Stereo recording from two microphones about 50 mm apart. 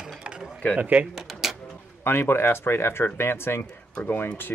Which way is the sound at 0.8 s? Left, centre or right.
Right.